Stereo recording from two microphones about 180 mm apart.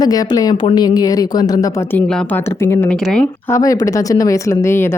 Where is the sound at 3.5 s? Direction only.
20° left (ahead or behind).